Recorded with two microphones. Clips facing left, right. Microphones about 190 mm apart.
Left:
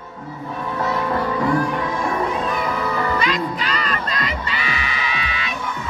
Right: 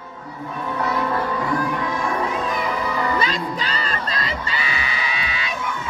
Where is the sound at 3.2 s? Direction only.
30° right (ahead or behind).